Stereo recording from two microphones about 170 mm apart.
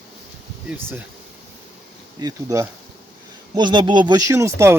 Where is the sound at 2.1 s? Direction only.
20° right (ahead or behind).